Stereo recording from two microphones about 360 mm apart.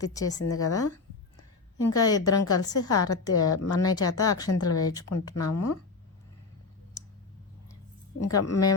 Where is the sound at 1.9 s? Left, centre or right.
Centre.